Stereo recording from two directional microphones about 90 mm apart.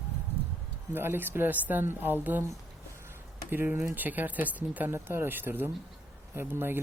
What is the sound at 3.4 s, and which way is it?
A man's voice, 25° right (ahead or behind).